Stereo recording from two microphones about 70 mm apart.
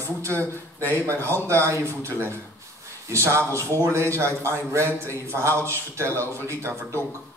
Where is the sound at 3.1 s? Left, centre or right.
Right.